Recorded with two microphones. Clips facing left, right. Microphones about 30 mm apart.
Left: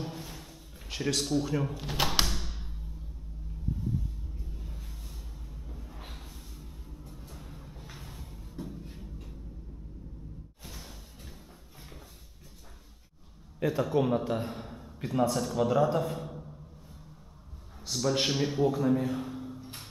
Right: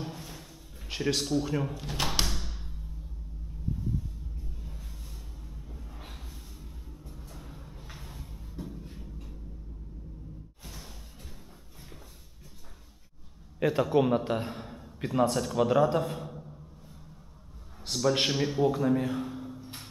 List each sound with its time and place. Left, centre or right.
0.0 s music: centre
0.8 s speech: centre
1.8 s music: centre
4.4 s music: centre
10.6 s a sound: centre
13.6 s a sound: right
13.8 s a man's voice: centre
16.0 s a sound: centre
17.9 s a man's voice: right
18.2 s a man's voice: centre